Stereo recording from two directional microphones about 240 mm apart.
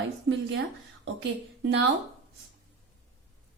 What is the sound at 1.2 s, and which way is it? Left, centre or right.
Speech, right.